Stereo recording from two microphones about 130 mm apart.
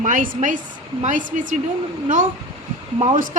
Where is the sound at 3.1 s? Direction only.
90° right.